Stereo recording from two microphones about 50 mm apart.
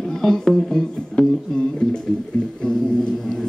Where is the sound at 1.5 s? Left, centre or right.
Centre.